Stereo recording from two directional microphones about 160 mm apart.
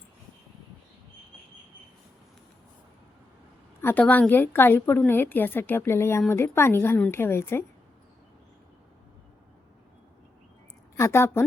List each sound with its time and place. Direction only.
3.8 s a woman's voice: 10° left (ahead or behind)
10.9 s a woman's voice: 15° left (ahead or behind)